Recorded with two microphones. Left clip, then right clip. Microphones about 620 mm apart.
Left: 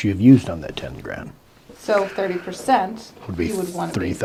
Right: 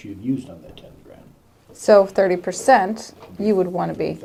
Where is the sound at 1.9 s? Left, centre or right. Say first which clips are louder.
Right 6 dB; right.